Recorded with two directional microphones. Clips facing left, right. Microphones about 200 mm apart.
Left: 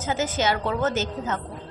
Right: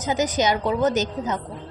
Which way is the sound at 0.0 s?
15° right (ahead or behind).